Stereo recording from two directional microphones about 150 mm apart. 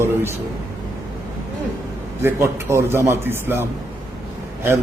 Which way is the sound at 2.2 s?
15° right (ahead or behind).